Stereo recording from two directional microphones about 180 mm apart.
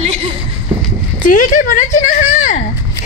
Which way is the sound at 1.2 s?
45° left (ahead or behind).